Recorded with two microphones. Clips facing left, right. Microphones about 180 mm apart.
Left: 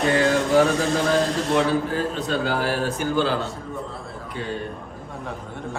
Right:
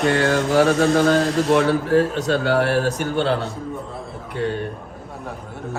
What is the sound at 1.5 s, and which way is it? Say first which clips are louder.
A man's voice: right 6 dB; 65° right (ahead or behind).